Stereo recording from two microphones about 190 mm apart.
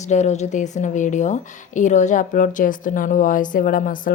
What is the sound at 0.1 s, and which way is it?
A woman's voice, 35° left (ahead or behind).